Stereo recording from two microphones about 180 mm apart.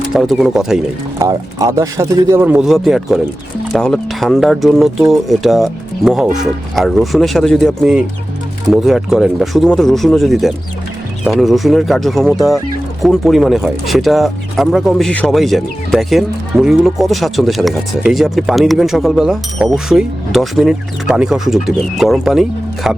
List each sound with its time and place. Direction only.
0.1 s speech: centre (ahead or behind)
1.2 s speech: 20° right (ahead or behind)
2.6 s speech: centre (ahead or behind)